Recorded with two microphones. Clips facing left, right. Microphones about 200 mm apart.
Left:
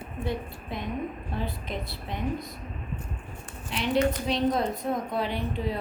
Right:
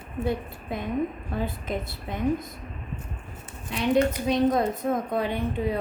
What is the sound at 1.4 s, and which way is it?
A woman's voice, 50° right (ahead or behind).